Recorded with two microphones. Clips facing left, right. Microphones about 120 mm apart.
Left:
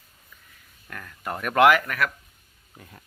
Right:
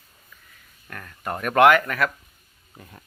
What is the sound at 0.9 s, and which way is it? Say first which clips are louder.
Speech: right 1 dB; 25° right (ahead or behind).